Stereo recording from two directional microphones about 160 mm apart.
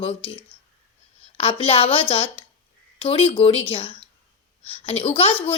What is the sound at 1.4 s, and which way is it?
A woman's voice, 35° left (ahead or behind).